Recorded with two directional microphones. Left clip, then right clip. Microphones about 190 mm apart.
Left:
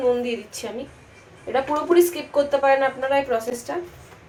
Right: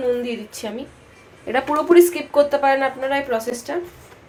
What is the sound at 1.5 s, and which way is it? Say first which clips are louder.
Speech: right 4 dB; 45° right (ahead or behind).